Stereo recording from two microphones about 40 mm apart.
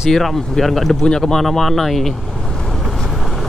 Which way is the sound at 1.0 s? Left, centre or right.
Centre.